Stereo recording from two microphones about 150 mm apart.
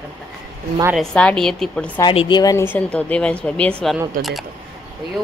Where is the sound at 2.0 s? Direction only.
30° left (ahead or behind).